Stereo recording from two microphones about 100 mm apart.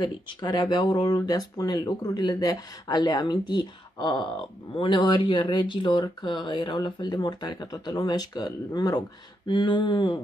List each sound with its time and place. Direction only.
0.0 s speech: 45° left (ahead or behind)
9.5 s speech: 55° left (ahead or behind)